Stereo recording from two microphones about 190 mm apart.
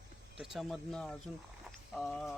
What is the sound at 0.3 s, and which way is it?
Speech, centre (ahead or behind).